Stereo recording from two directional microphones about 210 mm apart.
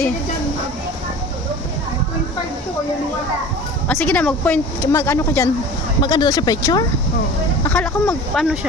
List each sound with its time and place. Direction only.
3.8 s speech: 5° left (ahead or behind)